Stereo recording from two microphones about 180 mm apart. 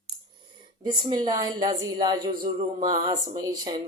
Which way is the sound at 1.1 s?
20° right (ahead or behind).